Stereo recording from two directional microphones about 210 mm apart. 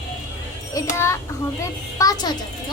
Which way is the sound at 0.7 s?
15° left (ahead or behind).